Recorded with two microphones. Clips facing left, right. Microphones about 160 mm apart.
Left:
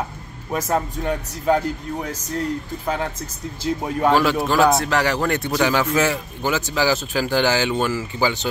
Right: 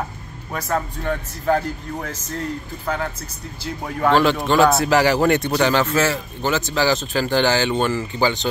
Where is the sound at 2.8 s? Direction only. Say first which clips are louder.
Even; 20° left (ahead or behind).